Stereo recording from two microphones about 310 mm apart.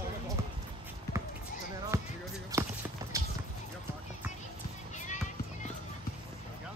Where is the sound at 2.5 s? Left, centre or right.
Centre.